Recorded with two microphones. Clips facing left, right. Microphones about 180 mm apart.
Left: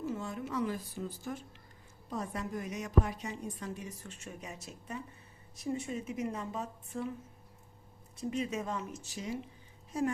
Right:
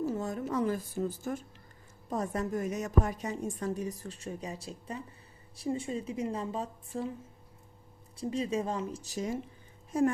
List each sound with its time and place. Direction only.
0.0 s a sound: 40° right (ahead or behind)
2.0 s a woman's voice: 45° right (ahead or behind)
8.1 s a woman's voice: 30° right (ahead or behind)